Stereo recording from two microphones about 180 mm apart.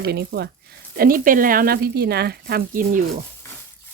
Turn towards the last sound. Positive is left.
turn(degrees=-50)  # may be behind; listen again after turning